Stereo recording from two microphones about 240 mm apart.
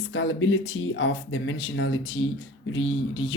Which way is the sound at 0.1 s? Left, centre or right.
Left.